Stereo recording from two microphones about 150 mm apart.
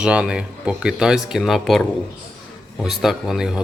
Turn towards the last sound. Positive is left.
turn(degrees=-5)  # may be behind; listen again after turning